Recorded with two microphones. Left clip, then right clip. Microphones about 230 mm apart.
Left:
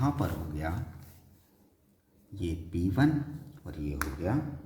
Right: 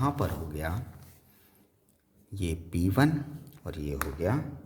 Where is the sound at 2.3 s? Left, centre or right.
Right.